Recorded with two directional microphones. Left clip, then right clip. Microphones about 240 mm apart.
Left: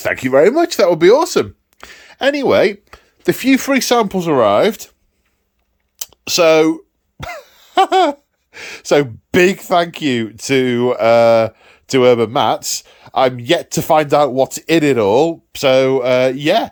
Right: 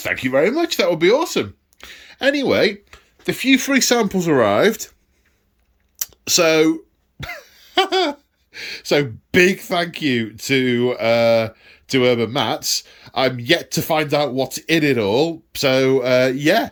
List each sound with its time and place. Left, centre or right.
0.0 s speech: left
6.0 s throat clearing: centre
8.5 s speech: centre